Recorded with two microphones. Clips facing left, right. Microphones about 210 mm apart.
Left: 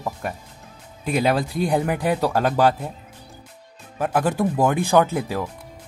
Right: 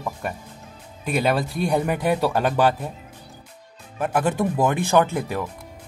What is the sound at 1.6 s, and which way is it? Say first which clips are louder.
Speech: even; 10° left (ahead or behind).